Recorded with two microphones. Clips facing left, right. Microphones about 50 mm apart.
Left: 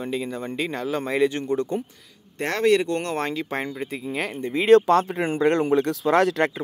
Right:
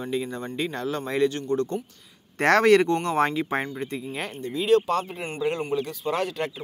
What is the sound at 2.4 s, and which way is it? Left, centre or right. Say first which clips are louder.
Speech: right 3 dB; right.